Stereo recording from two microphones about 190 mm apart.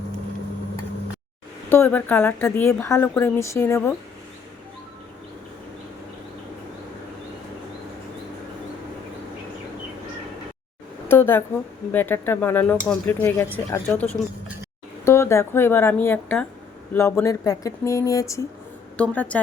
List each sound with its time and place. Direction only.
1.7 s a woman's voice: 10° left (ahead or behind)
11.1 s a woman's voice: 10° left (ahead or behind)